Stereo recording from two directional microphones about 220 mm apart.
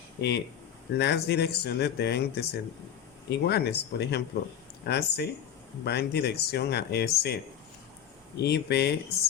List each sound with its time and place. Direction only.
0.2 s speech: 50° left (ahead or behind)
8.4 s speech: 50° left (ahead or behind)